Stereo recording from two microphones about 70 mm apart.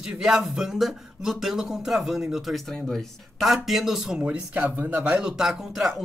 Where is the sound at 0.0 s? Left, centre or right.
Centre.